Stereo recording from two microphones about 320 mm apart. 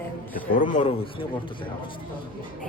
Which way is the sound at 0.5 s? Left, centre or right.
Left.